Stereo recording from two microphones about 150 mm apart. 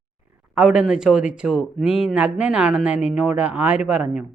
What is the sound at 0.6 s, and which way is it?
A man's voice, 5° right (ahead or behind).